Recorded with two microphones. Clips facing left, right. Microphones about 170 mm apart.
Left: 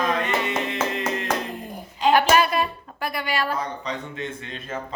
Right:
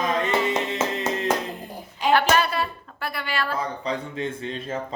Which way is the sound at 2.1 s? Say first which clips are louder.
Left 2 dB; 15° left (ahead or behind).